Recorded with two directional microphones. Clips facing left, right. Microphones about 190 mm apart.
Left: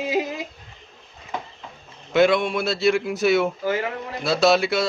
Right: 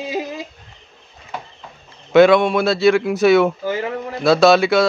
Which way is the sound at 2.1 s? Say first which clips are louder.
Right 7 dB; 80° right.